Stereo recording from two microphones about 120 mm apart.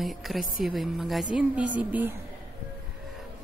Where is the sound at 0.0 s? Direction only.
Centre (ahead or behind).